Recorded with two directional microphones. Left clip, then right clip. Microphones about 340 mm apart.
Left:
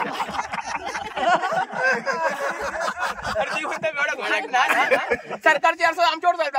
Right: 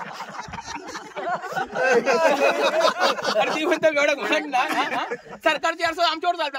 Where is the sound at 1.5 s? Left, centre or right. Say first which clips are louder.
Right 1 dB; centre.